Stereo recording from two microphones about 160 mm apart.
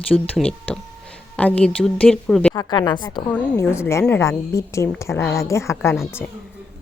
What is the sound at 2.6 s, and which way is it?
Speech, 25° left (ahead or behind).